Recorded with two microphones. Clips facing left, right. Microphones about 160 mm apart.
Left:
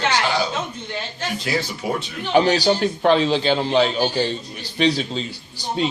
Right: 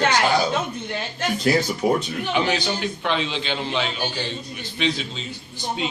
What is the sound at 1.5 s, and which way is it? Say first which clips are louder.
Speech: right 5 dB; 45° right (ahead or behind).